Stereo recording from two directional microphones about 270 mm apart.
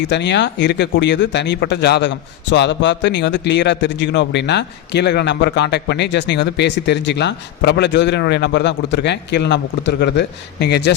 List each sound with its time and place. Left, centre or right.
0.1 s speech: left